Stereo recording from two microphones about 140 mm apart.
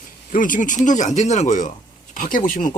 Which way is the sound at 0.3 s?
75° left (ahead or behind).